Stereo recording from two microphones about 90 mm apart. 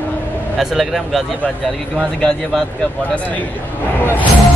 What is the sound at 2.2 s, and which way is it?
Speech, 10° left (ahead or behind).